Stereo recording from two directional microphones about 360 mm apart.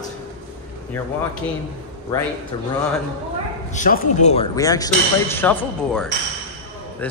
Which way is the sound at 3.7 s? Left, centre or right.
Centre.